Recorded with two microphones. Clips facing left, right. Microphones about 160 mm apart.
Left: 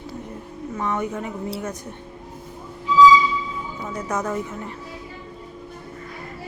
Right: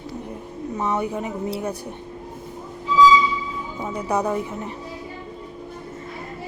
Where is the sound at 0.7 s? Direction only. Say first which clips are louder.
Right 2 dB; 20° right (ahead or behind).